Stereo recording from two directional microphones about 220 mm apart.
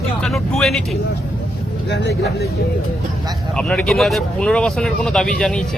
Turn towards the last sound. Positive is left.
turn(degrees=0)  # may be behind; listen again after turning